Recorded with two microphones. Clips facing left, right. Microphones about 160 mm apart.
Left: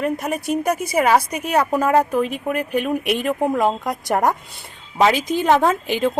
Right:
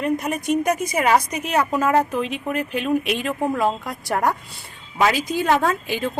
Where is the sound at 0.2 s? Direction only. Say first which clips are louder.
Even; 5° left (ahead or behind).